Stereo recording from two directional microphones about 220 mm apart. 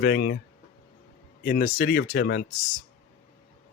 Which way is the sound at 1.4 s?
40° left (ahead or behind).